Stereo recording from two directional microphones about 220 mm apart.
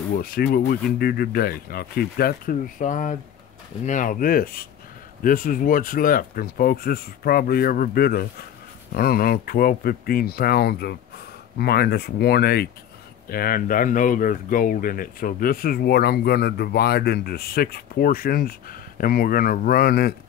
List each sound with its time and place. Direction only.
0.2 s speech: 45° left (ahead or behind)